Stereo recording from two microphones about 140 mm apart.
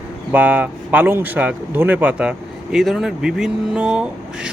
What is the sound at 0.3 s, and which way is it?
Speech, 10° right (ahead or behind).